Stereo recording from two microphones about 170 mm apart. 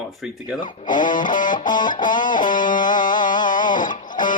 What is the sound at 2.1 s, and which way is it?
Music, 50° left (ahead or behind).